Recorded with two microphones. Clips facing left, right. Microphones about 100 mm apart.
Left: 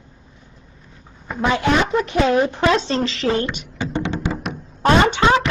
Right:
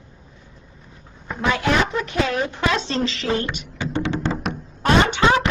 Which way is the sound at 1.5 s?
25° left (ahead or behind).